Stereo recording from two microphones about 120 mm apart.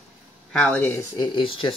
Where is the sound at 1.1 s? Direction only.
45° left (ahead or behind).